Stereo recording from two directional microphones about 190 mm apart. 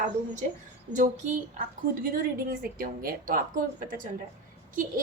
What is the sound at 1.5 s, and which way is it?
Speech, 50° right (ahead or behind).